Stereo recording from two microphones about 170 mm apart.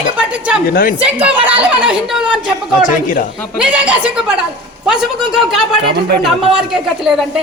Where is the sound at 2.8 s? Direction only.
50° left (ahead or behind).